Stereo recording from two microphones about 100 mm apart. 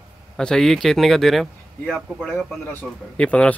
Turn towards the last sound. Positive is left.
turn(degrees=10)  # may be behind; listen again after turning